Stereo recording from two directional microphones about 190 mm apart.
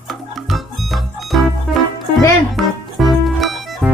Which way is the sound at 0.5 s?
Centre (ahead or behind).